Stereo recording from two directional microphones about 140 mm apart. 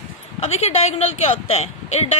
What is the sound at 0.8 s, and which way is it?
Speech, 50° left (ahead or behind).